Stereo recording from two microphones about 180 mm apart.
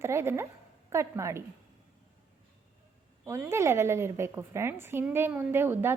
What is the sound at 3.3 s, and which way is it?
Speech, 15° right (ahead or behind).